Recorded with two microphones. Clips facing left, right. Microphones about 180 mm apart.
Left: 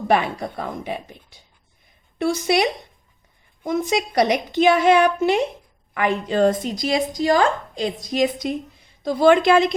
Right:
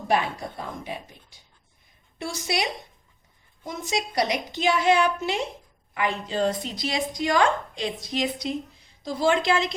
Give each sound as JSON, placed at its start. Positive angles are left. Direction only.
{"t": 0.1, "sound": "a woman's voice", "side_deg": 60}
{"t": 9.0, "sound": "a woman's voice", "side_deg": 60}